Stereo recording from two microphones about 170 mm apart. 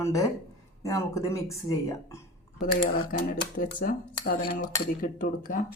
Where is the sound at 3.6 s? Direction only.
55° left (ahead or behind).